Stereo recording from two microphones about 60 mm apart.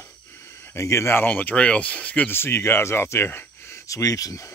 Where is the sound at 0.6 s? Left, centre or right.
Left.